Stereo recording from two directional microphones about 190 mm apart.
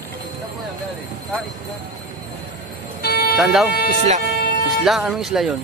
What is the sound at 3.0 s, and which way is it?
Vehicle, 55° left (ahead or behind).